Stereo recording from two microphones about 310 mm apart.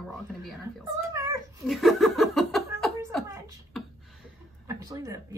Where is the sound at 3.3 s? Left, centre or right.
Centre.